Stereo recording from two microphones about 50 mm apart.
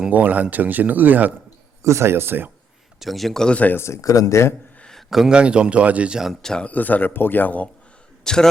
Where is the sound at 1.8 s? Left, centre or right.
Right.